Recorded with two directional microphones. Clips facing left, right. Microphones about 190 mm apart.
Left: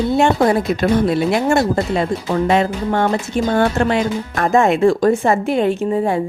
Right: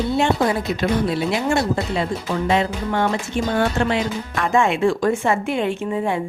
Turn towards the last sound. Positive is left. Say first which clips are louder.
# left 5 dB
turn(degrees=40)  # may be behind; listen again after turning